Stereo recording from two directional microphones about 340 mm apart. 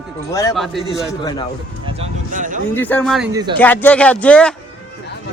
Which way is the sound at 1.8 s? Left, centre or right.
Centre.